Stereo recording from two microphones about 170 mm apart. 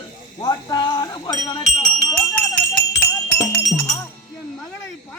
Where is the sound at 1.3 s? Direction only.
45° left (ahead or behind).